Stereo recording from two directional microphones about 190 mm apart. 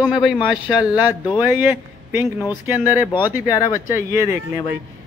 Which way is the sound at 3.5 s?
15° left (ahead or behind).